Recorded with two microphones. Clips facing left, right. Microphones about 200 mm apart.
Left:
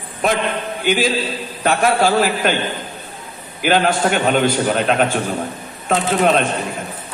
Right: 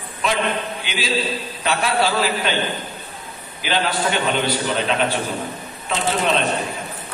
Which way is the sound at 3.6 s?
50° left (ahead or behind).